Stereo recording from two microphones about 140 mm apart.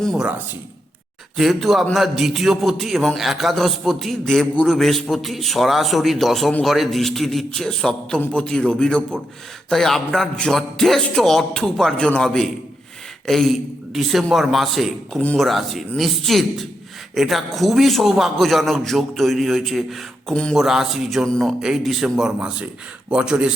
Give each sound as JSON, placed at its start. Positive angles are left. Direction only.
{"t": 0.0, "sound": "a man's voice", "side_deg": -5}
{"t": 1.4, "sound": "a man's voice", "side_deg": 0}
{"t": 15.4, "sound": "a man's voice", "side_deg": 0}